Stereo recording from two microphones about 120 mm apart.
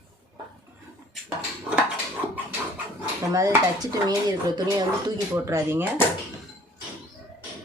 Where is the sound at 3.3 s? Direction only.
30° right (ahead or behind).